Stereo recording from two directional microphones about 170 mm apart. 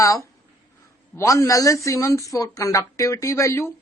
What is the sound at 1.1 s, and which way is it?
A woman's voice, 20° left (ahead or behind).